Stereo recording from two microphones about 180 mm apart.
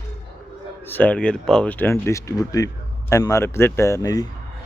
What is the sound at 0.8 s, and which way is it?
A man's voice, 10° left (ahead or behind).